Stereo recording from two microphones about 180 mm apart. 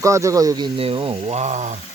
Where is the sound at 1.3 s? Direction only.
40° right (ahead or behind).